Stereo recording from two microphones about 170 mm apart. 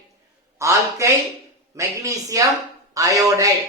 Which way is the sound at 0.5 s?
15° right (ahead or behind).